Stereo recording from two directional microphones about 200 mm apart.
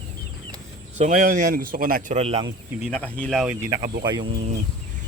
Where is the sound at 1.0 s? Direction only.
45° right (ahead or behind).